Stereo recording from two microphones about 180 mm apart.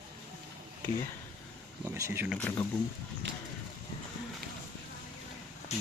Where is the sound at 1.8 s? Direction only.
15° right (ahead or behind).